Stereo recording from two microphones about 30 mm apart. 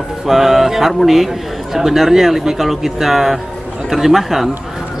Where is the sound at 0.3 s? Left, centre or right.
Centre.